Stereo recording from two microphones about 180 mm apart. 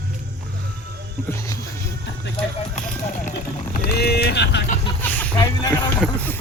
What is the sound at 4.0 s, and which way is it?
Vehicle, 65° left (ahead or behind).